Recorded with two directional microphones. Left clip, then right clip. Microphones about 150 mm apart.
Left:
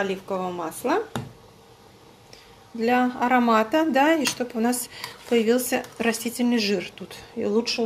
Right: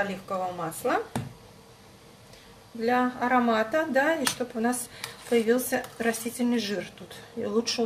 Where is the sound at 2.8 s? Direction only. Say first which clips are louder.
Left 3 dB; 50° left (ahead or behind).